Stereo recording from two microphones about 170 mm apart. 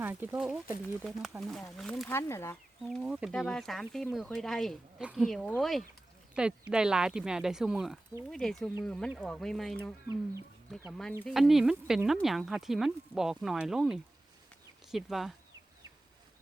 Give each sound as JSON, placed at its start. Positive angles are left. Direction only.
{"t": 0.0, "sound": "speech", "side_deg": -10}
{"t": 2.0, "sound": "speech", "side_deg": 15}
{"t": 2.9, "sound": "speech", "side_deg": -5}